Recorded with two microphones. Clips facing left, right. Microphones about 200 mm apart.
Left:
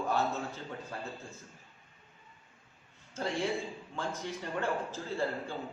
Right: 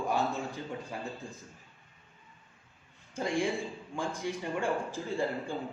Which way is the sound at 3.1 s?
15° right (ahead or behind).